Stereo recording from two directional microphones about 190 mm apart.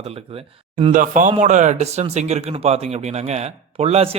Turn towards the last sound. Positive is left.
turn(degrees=-30)  # may be behind; listen again after turning